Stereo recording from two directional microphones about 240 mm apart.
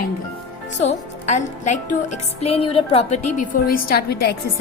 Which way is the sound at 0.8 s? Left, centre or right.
Left.